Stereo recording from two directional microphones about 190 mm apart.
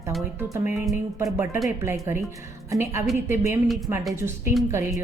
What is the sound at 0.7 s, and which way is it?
Music, centre (ahead or behind).